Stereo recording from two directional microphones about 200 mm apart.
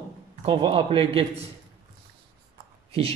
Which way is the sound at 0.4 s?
30° right (ahead or behind).